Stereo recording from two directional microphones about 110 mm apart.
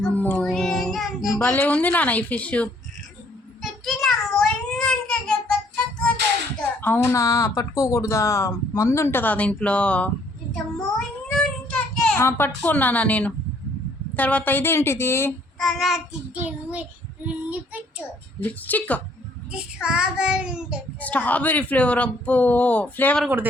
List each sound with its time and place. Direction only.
0.1 s music: 15° left (ahead or behind)
0.4 s child singing: centre (ahead or behind)
1.4 s speech: 15° left (ahead or behind)
3.6 s child singing: 5° left (ahead or behind)
6.8 s speech: 20° left (ahead or behind)
11.3 s child singing: 5° left (ahead or behind)
12.2 s speech: 15° left (ahead or behind)
15.5 s child singing: centre (ahead or behind)
16.4 s child singing: 10° right (ahead or behind)
17.2 s a child's voice: 10° right (ahead or behind)
18.4 s speech: 15° left (ahead or behind)
19.5 s child singing: 5° right (ahead or behind)
21.0 s speech: 15° left (ahead or behind)